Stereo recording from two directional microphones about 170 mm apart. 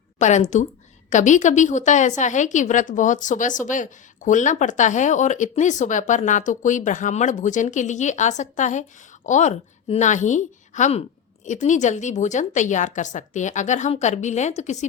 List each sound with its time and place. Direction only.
0.2 s a woman's voice: 45° left (ahead or behind)